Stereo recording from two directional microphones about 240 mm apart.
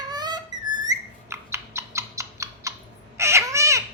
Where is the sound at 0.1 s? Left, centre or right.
Centre.